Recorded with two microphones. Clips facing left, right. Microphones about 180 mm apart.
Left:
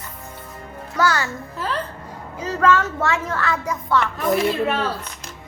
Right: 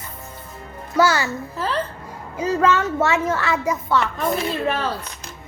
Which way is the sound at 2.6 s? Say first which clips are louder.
Left 2 dB; 20° right (ahead or behind).